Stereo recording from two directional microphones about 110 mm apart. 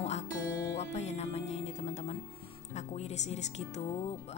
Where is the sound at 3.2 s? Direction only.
80° left.